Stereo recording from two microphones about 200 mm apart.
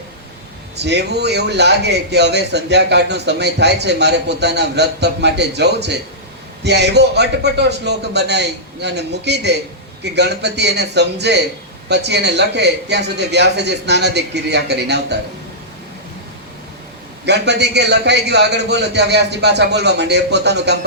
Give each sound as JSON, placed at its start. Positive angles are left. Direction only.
{"t": 0.8, "sound": "a man's voice", "side_deg": -55}
{"t": 17.2, "sound": "a man's voice", "side_deg": -55}